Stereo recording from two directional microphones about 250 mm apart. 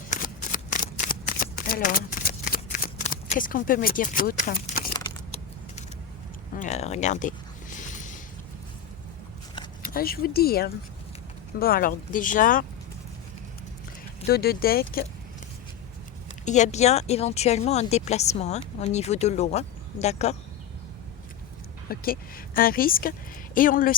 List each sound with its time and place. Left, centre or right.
0.1 s shuffling cards: left
4.9 s a sound: centre
6.6 s speech: left
7.8 s a sound: left
9.8 s speech: left
14.3 s speech: left
16.3 s speech: left
21.8 s speech: left